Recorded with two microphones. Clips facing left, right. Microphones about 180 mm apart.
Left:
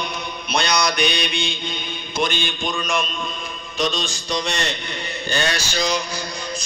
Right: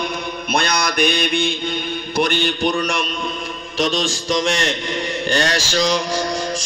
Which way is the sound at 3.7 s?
90° right.